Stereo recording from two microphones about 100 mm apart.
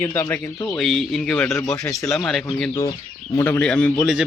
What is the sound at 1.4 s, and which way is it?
Speech, 25° left (ahead or behind).